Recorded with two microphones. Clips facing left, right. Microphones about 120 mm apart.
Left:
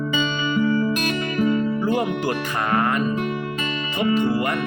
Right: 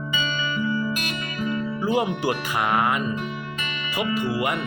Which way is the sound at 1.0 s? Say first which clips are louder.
Left 7 dB; 35° left (ahead or behind).